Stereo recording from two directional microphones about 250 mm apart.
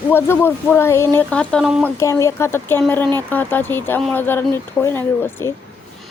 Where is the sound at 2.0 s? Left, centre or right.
Centre.